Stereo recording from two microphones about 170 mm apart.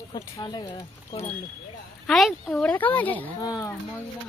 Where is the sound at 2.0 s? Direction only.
Centre (ahead or behind).